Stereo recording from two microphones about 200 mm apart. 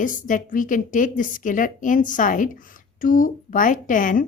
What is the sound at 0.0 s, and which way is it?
A woman's voice, 40° left (ahead or behind).